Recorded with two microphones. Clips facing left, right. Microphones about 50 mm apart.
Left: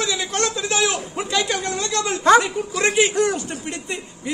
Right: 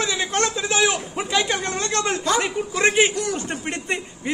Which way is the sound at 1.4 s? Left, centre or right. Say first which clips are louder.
Even; right.